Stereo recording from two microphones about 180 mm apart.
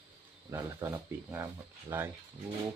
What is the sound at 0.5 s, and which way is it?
Speech, 15° right (ahead or behind).